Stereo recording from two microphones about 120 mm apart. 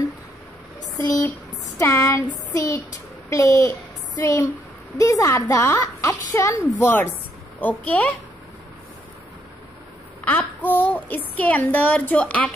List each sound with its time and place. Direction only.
1.8 s speech: 25° left (ahead or behind)
6.8 s speech: 15° left (ahead or behind)
10.2 s speech: 15° left (ahead or behind)